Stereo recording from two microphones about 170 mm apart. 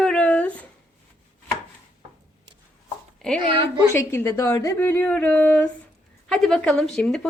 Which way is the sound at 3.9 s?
15° left (ahead or behind).